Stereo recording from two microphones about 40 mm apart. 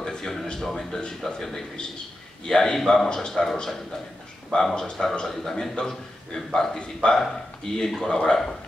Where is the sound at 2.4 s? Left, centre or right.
Centre.